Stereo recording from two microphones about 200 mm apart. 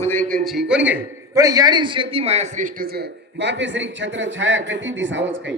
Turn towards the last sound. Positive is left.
turn(degrees=-70)  # may be behind; listen again after turning